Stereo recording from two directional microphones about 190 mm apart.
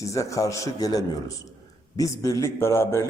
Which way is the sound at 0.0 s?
15° left (ahead or behind).